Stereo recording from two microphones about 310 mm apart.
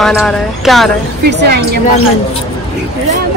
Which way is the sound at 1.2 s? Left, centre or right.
Right.